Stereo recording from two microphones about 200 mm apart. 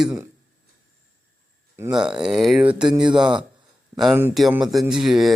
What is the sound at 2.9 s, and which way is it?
Speech, 25° right (ahead or behind).